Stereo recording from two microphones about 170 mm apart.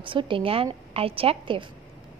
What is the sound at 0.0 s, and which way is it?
A woman's voice, 30° right (ahead or behind).